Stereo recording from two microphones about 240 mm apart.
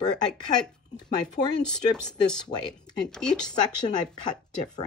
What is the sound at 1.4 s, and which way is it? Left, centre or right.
Speech, left.